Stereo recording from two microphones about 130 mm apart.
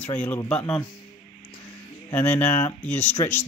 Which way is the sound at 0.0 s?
10° left (ahead or behind).